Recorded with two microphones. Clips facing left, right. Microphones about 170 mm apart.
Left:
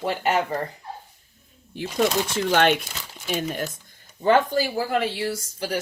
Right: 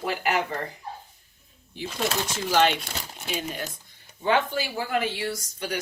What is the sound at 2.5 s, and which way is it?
Speech, 60° left (ahead or behind).